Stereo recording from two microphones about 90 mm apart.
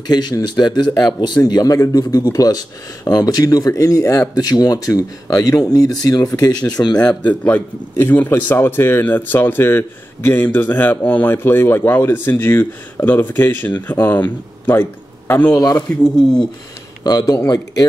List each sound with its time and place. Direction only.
0.0 s speech: 50° left (ahead or behind)
1.4 s speech: 40° left (ahead or behind)
7.0 s a man's voice: 15° left (ahead or behind)
17.0 s speech: 50° left (ahead or behind)